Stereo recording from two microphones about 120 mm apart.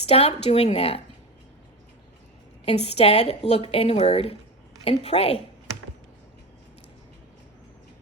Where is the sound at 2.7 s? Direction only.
60° left (ahead or behind).